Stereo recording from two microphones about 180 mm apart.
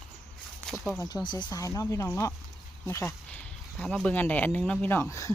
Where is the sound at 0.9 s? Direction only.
20° left (ahead or behind).